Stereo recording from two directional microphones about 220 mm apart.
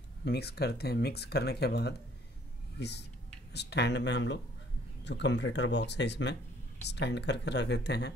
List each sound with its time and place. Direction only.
0.2 s speech: 50° left (ahead or behind)